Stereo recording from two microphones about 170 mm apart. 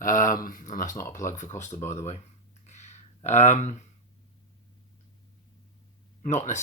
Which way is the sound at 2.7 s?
40° left (ahead or behind).